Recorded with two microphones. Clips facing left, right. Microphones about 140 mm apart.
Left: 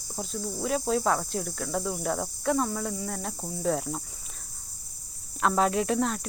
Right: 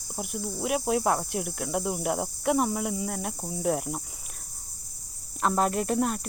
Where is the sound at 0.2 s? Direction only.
15° right (ahead or behind).